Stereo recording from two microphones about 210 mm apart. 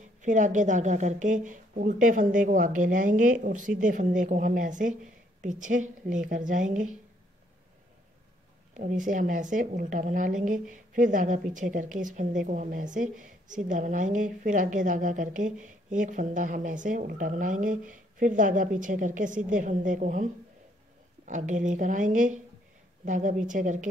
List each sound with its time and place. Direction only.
0.2 s speech: 35° right (ahead or behind)
8.7 s speech: 35° right (ahead or behind)
21.3 s speech: 35° right (ahead or behind)